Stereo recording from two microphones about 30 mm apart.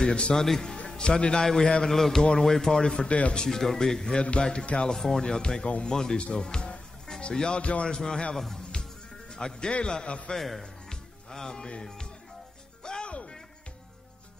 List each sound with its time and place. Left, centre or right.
0.0 s a man's voice: left
0.8 s a man's voice: left
1.9 s speech: centre
2.7 s a man's voice: left
3.1 s speech: left
3.4 s speech: centre
4.2 s speech: left
4.9 s speech: centre
5.2 s speech: left
5.9 s a man's voice: left
10.0 s speech: left
10.3 s speech: centre
10.6 s music: left